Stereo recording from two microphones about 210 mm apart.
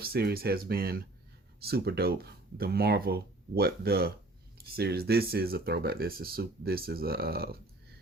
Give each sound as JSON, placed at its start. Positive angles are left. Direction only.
{"t": 0.0, "sound": "speech", "side_deg": -50}